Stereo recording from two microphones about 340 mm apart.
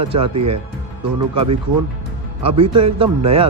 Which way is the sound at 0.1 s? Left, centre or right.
Centre.